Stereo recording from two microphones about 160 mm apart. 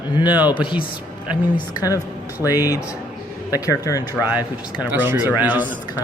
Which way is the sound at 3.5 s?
20° left (ahead or behind).